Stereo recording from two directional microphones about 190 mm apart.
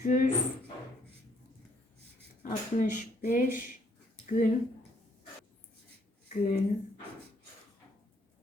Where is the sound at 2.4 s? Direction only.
45° left (ahead or behind).